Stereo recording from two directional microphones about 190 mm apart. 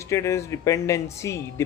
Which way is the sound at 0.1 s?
15° left (ahead or behind).